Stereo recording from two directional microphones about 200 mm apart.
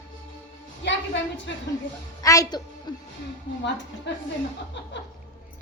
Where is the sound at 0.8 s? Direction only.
60° left (ahead or behind).